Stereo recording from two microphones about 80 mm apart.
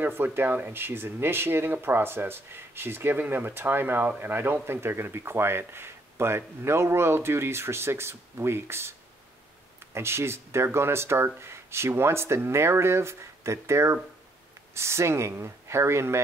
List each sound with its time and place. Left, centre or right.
0.0 s speech: right
9.9 s speech: right